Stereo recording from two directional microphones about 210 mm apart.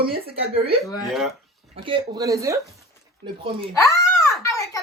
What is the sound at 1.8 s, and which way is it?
A woman's voice, 20° right (ahead or behind).